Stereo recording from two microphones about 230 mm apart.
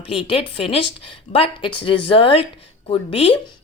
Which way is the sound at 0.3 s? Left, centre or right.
Left.